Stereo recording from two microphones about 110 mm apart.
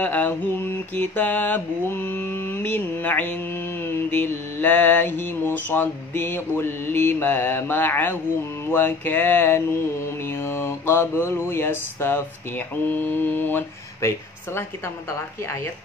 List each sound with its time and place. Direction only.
0.0 s mantra: 15° left (ahead or behind)